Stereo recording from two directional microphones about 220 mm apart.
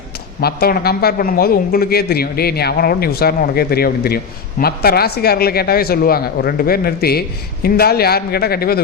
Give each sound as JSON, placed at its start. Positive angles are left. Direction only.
{"t": 0.4, "sound": "speech", "side_deg": 45}